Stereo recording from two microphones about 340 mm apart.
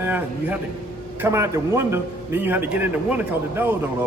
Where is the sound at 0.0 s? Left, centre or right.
Centre.